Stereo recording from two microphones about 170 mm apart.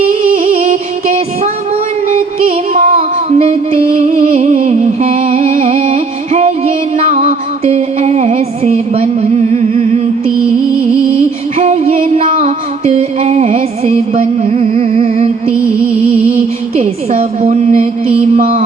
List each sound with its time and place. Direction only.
0.1 s music: 55° right (ahead or behind)
2.8 s music: 50° right (ahead or behind)
11.5 s music: 45° right (ahead or behind)
17.4 s mantra: 40° right (ahead or behind)
18.3 s music: 55° right (ahead or behind)